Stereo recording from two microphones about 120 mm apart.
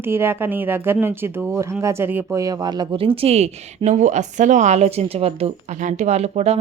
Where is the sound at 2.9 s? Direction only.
50° right (ahead or behind).